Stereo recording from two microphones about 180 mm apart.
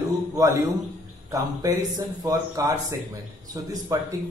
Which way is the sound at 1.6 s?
20° right (ahead or behind).